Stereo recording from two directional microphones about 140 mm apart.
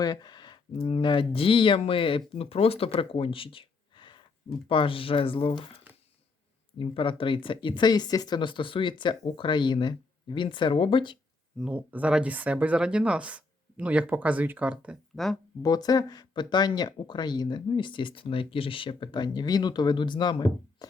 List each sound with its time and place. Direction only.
0.0 s speech: 30° left (ahead or behind)
11.6 s speech: 10° right (ahead or behind)
15.1 s speech: centre (ahead or behind)
15.6 s speech: 25° left (ahead or behind)